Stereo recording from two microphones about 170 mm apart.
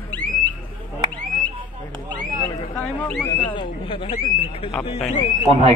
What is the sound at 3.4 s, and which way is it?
Speech, 30° left (ahead or behind).